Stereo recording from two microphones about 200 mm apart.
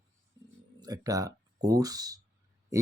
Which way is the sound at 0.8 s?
20° right (ahead or behind).